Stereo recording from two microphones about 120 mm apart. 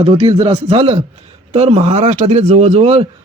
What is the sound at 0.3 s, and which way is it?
Speech, 55° right (ahead or behind).